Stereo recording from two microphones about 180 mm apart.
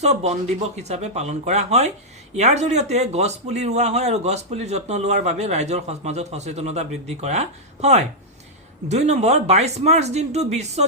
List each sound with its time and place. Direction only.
0.0 s a man's voice: 35° right (ahead or behind)